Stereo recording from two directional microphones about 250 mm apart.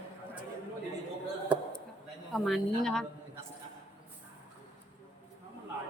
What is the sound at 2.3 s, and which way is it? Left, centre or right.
Speech, centre.